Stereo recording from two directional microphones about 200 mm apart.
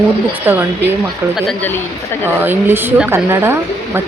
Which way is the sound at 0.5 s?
10° right (ahead or behind).